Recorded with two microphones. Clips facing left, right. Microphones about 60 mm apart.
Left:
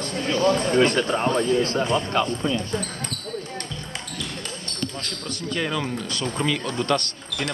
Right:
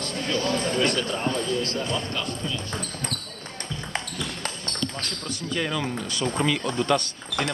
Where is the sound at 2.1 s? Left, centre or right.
Left.